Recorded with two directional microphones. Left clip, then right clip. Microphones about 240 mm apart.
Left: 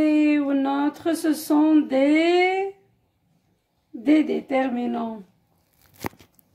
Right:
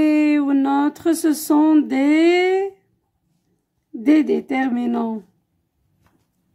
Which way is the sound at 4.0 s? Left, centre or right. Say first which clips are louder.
Right 4 dB; right.